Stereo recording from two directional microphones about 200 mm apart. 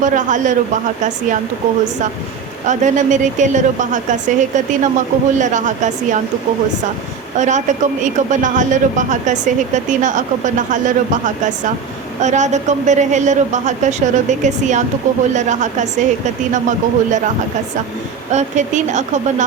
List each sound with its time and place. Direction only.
0.0 s a man's voice: 40° right (ahead or behind)
2.6 s a man's voice: 35° right (ahead or behind)
7.3 s a man's voice: 35° right (ahead or behind)
18.3 s a man's voice: 35° right (ahead or behind)